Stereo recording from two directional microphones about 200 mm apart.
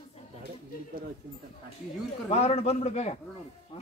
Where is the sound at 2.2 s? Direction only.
30° left (ahead or behind).